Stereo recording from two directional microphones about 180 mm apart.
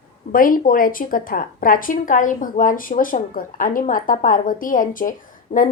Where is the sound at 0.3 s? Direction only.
50° left (ahead or behind).